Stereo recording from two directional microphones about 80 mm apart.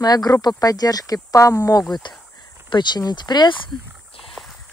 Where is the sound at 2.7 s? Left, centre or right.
Left.